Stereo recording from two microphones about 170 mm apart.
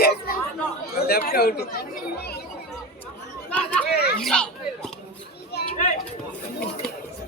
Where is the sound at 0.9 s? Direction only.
65° left (ahead or behind).